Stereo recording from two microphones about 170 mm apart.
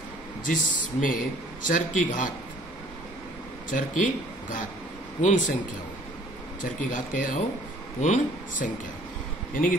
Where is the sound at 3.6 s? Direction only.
50° left (ahead or behind).